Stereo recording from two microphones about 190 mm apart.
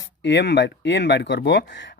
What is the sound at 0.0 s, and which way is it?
Speech, 70° left (ahead or behind).